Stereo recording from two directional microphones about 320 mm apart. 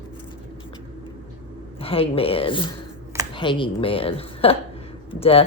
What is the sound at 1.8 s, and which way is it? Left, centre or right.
A woman's voice, centre.